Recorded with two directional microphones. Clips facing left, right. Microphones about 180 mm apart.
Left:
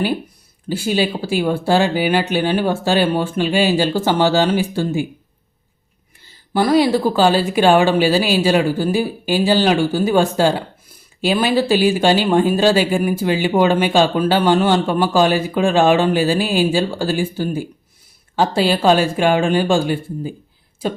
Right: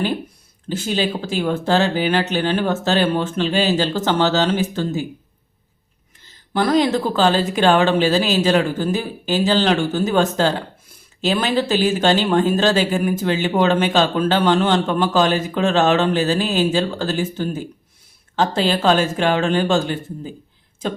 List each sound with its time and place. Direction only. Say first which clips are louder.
0.7 s speech: left 3 dB; 10° left (ahead or behind)
6.2 s speech: left 2 dB; 10° left (ahead or behind)